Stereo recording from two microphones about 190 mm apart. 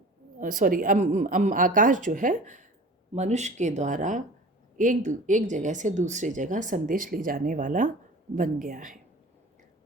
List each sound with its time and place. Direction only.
0.3 s speech: 45° right (ahead or behind)